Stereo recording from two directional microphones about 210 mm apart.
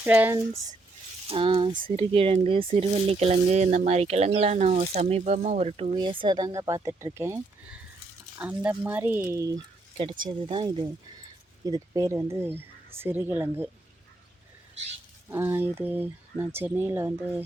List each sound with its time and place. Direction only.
0.0 s speech: 10° right (ahead or behind)
1.3 s speech: 25° right (ahead or behind); by 13.7 s 10° right (ahead or behind)
15.3 s speech: 10° right (ahead or behind)